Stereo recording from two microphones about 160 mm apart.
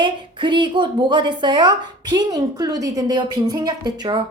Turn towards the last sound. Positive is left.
turn(degrees=-30)  # may be behind; listen again after turning